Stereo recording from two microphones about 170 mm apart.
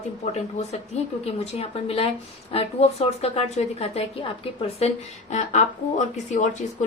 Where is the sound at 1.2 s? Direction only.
35° left (ahead or behind).